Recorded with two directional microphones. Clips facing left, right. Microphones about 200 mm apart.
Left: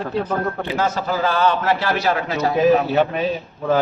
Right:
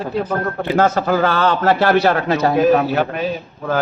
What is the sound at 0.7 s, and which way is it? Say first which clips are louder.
A man's voice: right 8 dB; 55° right (ahead or behind).